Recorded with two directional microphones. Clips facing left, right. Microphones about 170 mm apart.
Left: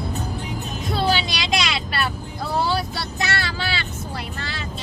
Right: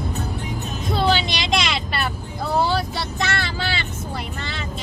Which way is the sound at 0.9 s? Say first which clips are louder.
Right 2 dB; centre (ahead or behind).